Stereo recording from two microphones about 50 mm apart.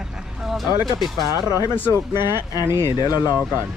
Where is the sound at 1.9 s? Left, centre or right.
Right.